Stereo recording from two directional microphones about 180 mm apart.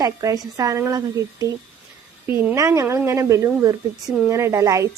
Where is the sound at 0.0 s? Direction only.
20° right (ahead or behind).